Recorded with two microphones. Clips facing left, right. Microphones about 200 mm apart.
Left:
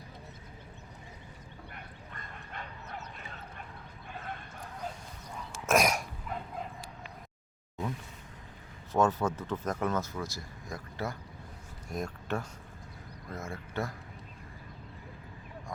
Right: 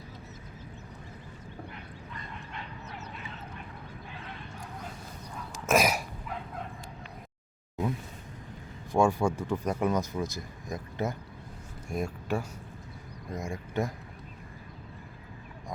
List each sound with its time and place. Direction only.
1.7 s bow-wow: 50° left (ahead or behind)
4.1 s a sound: 50° left (ahead or behind)
5.6 s cough: centre (ahead or behind)
8.9 s speech: 10° right (ahead or behind)
11.9 s speech: 10° right (ahead or behind)